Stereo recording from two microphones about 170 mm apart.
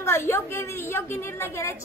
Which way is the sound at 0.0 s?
15° left (ahead or behind).